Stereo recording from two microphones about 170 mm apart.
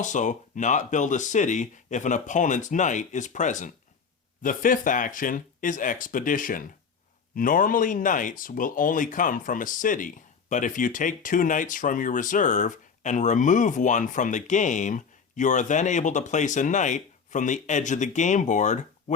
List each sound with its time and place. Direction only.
0.0 s speech: 45° left (ahead or behind)